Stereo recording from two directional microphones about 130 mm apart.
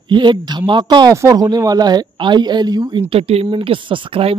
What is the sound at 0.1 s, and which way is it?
Speech, 35° right (ahead or behind).